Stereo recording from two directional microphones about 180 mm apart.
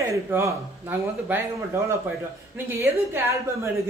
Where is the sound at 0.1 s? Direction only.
15° right (ahead or behind).